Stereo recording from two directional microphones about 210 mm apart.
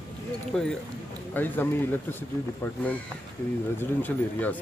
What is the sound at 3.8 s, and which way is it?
Speech, 10° left (ahead or behind).